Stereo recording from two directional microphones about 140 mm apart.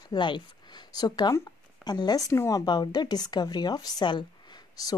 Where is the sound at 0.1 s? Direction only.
30° left (ahead or behind).